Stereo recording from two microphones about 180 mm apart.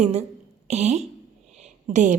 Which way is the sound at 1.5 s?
40° right (ahead or behind).